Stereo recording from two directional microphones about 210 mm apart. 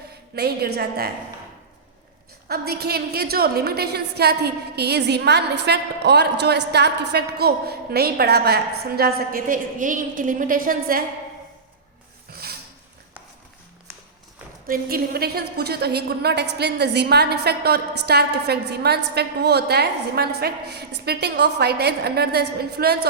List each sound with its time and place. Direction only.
0.3 s a woman's voice: 50° right (ahead or behind)
2.5 s a woman's voice: 50° right (ahead or behind)
12.3 s a sound: 45° right (ahead or behind)
14.7 s a woman's voice: 45° right (ahead or behind)